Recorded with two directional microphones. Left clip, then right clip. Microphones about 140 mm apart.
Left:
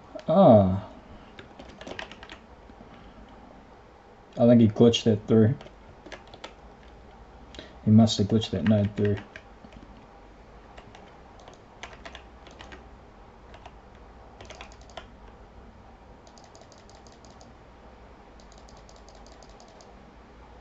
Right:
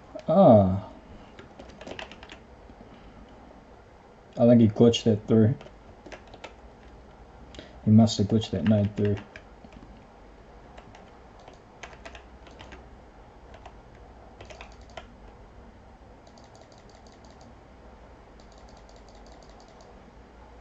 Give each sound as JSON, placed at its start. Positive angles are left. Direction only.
{"t": 0.2, "sound": "speech", "side_deg": -5}
{"t": 1.3, "sound": "typing", "side_deg": -5}
{"t": 4.4, "sound": "computer keyboard", "side_deg": -5}
{"t": 7.5, "sound": "speech", "side_deg": -5}
{"t": 11.8, "sound": "typing", "side_deg": -10}
{"t": 14.4, "sound": "typing", "side_deg": -10}